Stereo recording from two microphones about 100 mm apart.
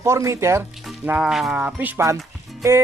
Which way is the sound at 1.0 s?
15° right (ahead or behind).